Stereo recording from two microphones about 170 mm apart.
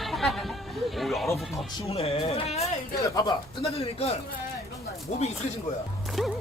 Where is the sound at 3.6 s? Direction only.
35° left (ahead or behind).